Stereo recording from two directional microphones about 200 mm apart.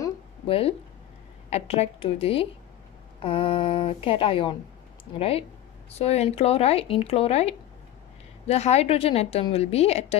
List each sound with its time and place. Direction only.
0.5 s speech: 30° left (ahead or behind)
5.9 s speech: 30° left (ahead or behind)